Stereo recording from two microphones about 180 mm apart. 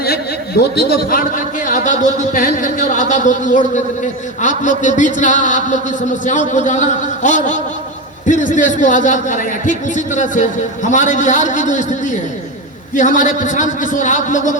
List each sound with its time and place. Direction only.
0.0 s a man's voice: 60° left (ahead or behind); by 14.5 s 45° left (ahead or behind)